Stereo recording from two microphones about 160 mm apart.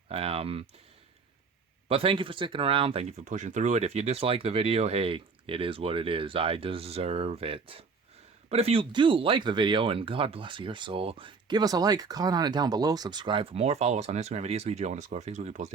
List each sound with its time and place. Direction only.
0.1 s speech: 40° right (ahead or behind)
1.9 s speech: 35° right (ahead or behind)